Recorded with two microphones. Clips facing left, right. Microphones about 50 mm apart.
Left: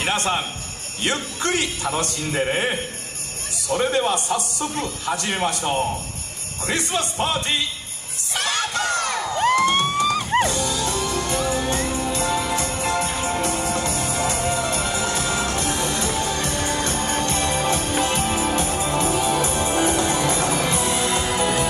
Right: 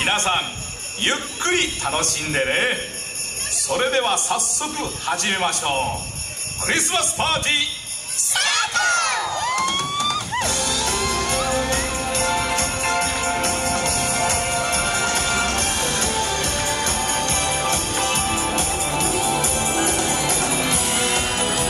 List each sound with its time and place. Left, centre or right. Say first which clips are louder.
0.0 s a man's voice: right 2 dB; right
1.6 s a man's voice: right 1 dB; right
2.4 s a man's voice: right 2 dB; right
8.3 s crowd: right 2 dB; right
9.7 s music: left 3 dB; left
10.5 s music: even; right
17.0 s music: even; centre
17.3 s music: left 1 dB; right
18.6 s music: left 1 dB; right
19.1 s music: left 1 dB; left
19.4 s music: left 1 dB; right